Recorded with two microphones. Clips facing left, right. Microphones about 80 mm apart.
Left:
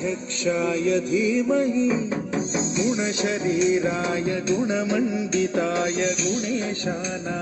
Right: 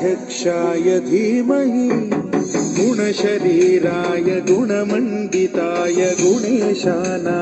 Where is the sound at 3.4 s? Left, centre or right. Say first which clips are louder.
Right 8 dB; right.